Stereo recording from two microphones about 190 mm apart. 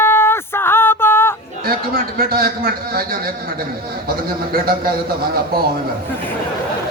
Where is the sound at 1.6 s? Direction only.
50° right (ahead or behind).